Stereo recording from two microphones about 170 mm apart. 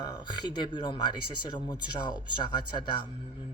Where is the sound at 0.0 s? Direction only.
25° left (ahead or behind).